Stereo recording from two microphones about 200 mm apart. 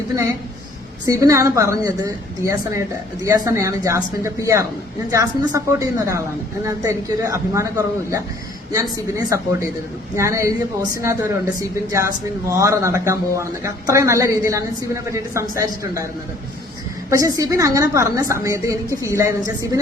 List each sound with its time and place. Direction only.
1.0 s speech: 15° right (ahead or behind)
17.1 s speech: 15° right (ahead or behind)